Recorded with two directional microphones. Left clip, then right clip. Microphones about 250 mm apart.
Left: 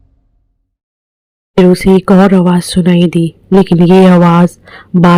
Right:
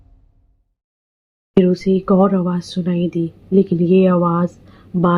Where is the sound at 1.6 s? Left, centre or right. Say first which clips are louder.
Left 9 dB; left.